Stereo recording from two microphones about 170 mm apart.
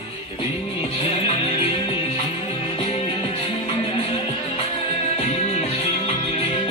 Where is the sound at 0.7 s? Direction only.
35° left (ahead or behind).